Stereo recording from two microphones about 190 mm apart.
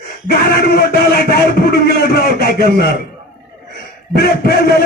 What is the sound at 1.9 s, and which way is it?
A man's voice, 55° left (ahead or behind).